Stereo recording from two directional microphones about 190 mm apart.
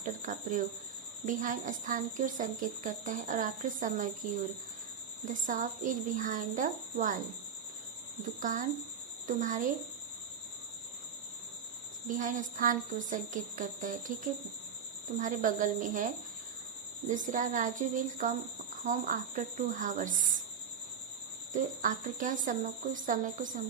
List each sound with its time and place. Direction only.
0.0 s cricket: 45° right (ahead or behind)
1.2 s a woman's voice: 45° right (ahead or behind)
5.3 s a woman's voice: 45° right (ahead or behind)
8.4 s a woman's voice: 45° right (ahead or behind)
12.0 s a woman's voice: 45° right (ahead or behind)
15.2 s a woman's voice: 45° right (ahead or behind)
17.1 s a woman's voice: 45° right (ahead or behind)
21.5 s a woman's voice: 45° right (ahead or behind)